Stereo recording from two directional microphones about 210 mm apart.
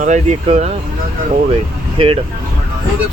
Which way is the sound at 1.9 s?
25° right (ahead or behind).